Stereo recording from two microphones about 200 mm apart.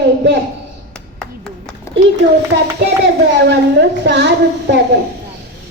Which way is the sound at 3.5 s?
60° right (ahead or behind).